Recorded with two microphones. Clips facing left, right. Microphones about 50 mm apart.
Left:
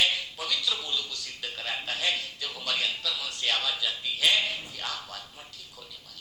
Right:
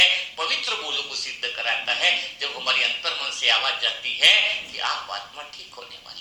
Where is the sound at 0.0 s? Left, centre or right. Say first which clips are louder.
Right 7 dB; right.